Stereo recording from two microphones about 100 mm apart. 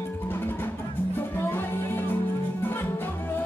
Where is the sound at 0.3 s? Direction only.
20° left (ahead or behind).